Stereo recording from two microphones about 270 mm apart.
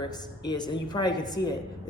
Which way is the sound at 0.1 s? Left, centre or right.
Centre.